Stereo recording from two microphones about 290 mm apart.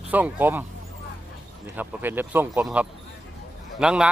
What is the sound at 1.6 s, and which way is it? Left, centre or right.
Speech, centre.